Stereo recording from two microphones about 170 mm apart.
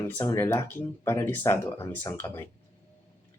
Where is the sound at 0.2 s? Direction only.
15° left (ahead or behind).